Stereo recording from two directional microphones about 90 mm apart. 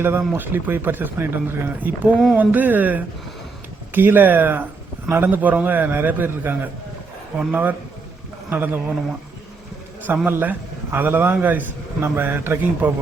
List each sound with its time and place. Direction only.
0.0 s a man's voice: 25° right (ahead or behind)
10.1 s a man's voice: 20° right (ahead or behind)